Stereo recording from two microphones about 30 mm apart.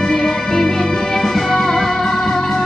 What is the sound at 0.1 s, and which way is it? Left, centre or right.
Music, left.